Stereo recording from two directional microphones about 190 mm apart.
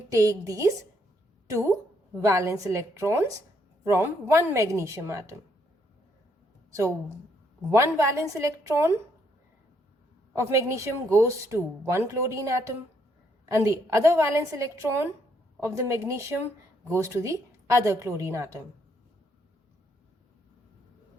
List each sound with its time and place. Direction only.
0.1 s a woman's voice: 15° right (ahead or behind)
7.7 s speech: 15° right (ahead or behind)
10.3 s speech: 15° right (ahead or behind)